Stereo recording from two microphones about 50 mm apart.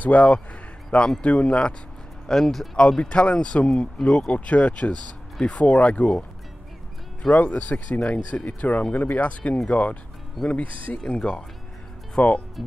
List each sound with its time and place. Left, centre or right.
0.0 s speech: left
2.2 s speech: centre
2.7 s speech: centre
7.3 s speech: left